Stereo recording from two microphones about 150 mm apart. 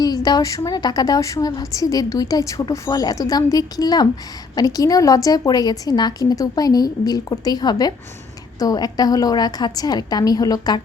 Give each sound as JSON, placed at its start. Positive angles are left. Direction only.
{"t": 0.0, "sound": "a woman's voice", "side_deg": 25}